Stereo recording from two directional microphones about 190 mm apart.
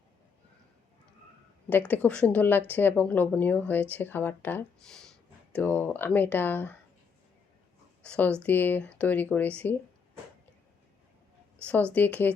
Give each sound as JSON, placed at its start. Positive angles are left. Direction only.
{"t": 1.9, "sound": "a woman's voice", "side_deg": 5}
{"t": 8.0, "sound": "a woman's voice", "side_deg": 5}
{"t": 11.6, "sound": "a woman's voice", "side_deg": 5}